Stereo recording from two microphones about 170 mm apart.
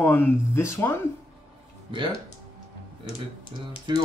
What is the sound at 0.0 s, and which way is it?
Speech, 10° left (ahead or behind).